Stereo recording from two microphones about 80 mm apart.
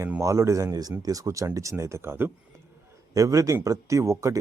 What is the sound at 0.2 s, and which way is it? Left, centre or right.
Speech, right.